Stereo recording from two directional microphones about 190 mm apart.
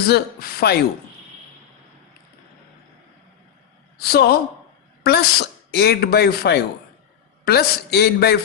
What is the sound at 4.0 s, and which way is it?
A man's voice, 55° left (ahead or behind).